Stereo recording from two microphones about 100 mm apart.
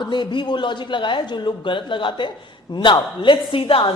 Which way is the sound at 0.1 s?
50° left (ahead or behind).